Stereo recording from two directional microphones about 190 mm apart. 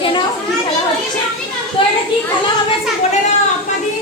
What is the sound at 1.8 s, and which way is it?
Children playing, 25° left (ahead or behind).